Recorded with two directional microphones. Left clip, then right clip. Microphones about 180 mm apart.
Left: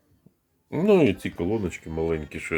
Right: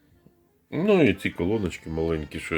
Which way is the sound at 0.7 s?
15° left (ahead or behind).